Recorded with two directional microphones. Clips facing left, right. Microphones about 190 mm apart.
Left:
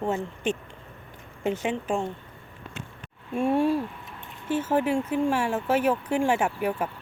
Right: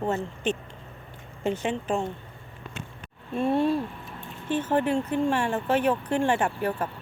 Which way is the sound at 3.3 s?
10° left (ahead or behind).